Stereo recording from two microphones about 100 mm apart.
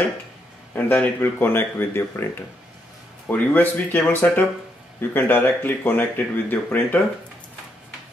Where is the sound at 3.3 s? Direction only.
15° left (ahead or behind).